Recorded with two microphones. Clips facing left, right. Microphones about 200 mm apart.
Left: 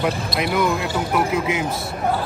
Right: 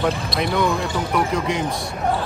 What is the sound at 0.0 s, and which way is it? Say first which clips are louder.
A man's voice: even; centre (ahead or behind).